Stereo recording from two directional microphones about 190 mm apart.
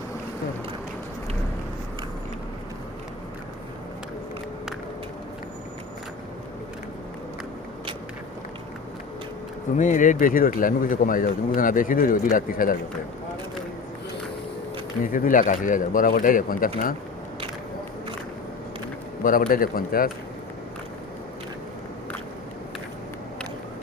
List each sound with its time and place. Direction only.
9.7 s speech: 45° left (ahead or behind)
15.0 s speech: 45° left (ahead or behind)
19.2 s speech: 45° left (ahead or behind)